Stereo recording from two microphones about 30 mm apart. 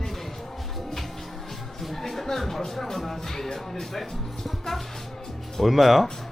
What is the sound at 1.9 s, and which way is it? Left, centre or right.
Speech, centre.